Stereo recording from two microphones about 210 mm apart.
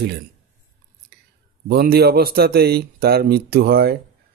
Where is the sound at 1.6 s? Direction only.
45° right (ahead or behind).